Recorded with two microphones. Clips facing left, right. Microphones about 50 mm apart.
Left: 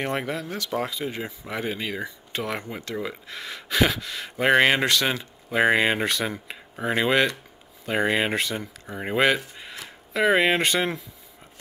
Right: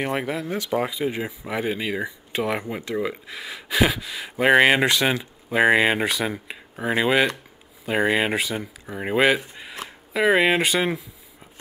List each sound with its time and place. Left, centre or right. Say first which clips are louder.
0.0 s speech: right 2 dB; centre